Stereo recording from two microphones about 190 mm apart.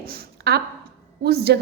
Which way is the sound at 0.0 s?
55° right (ahead or behind).